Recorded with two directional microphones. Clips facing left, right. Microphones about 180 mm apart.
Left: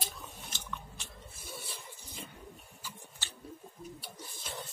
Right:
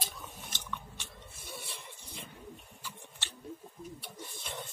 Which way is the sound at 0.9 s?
Centre (ahead or behind).